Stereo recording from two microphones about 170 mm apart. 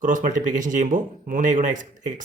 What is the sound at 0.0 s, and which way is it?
Speech, 50° right (ahead or behind).